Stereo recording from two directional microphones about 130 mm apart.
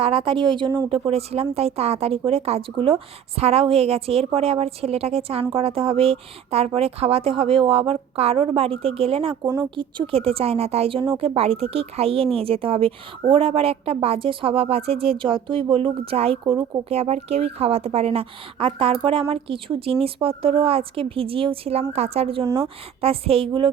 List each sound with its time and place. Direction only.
0.0 s a woman's voice: 45° right (ahead or behind)
16.4 s a woman's voice: 35° right (ahead or behind)
16.9 s speech: 55° right (ahead or behind)